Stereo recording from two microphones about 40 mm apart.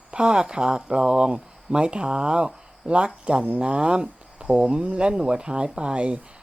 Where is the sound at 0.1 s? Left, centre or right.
Right.